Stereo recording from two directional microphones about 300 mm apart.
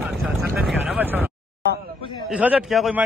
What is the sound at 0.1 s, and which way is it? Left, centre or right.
Vehicle, centre.